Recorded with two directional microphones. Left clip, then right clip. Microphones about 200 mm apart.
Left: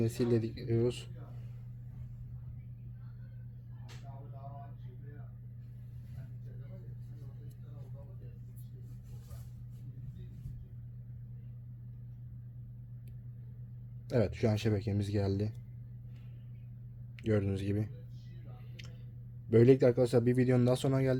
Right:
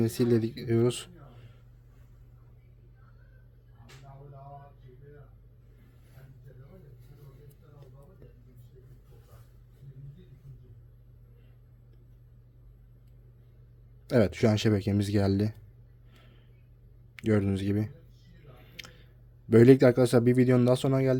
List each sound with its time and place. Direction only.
0.0 s speech: 35° right (ahead or behind)
14.1 s speech: 35° right (ahead or behind)
17.2 s speech: 30° right (ahead or behind)
18.8 s a sound: 40° right (ahead or behind)
19.5 s speech: 40° right (ahead or behind); by 21.2 s 15° right (ahead or behind)